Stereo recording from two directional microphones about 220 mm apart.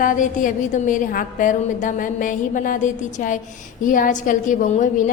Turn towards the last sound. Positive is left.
turn(degrees=35)  # may be behind; listen again after turning